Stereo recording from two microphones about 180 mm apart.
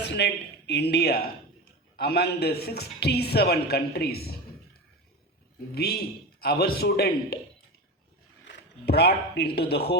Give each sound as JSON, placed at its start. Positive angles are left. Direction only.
{"t": 0.0, "sound": "a sound", "side_deg": 70}
{"t": 0.7, "sound": "a man's voice", "side_deg": 65}
{"t": 5.7, "sound": "a man's voice", "side_deg": 60}
{"t": 8.4, "sound": "speech", "side_deg": 65}